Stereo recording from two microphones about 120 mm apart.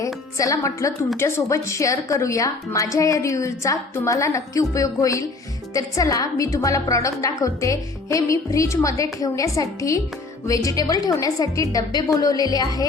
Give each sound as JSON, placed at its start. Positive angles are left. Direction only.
{"t": 0.0, "sound": "a woman's voice", "side_deg": 25}